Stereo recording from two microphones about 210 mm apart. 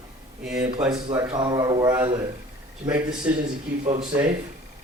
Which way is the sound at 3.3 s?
5° right (ahead or behind).